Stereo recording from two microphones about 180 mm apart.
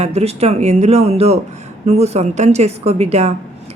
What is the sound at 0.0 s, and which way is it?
Speech, 35° right (ahead or behind).